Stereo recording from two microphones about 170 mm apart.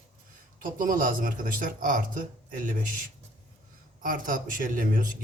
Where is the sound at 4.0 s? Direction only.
55° right (ahead or behind).